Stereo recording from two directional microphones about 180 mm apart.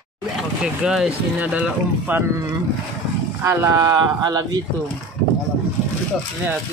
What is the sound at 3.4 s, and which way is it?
Speech, 15° right (ahead or behind).